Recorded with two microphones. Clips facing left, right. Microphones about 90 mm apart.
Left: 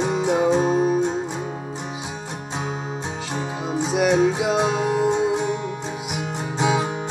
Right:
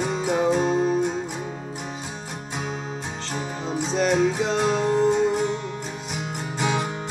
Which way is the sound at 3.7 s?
10° left (ahead or behind).